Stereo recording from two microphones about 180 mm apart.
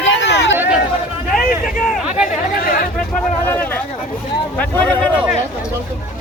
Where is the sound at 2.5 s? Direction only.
55° left (ahead or behind).